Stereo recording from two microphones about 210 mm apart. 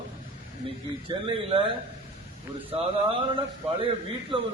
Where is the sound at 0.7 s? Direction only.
25° right (ahead or behind).